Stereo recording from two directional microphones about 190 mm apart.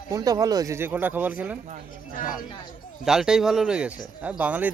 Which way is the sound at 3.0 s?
Centre (ahead or behind).